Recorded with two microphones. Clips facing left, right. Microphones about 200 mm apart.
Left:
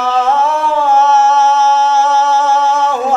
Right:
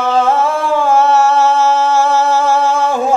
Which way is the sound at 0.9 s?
10° right (ahead or behind).